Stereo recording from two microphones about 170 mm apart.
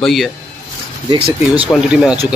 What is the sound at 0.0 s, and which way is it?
Speech, centre (ahead or behind).